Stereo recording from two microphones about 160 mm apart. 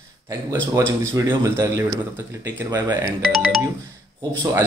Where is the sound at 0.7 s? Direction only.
20° right (ahead or behind).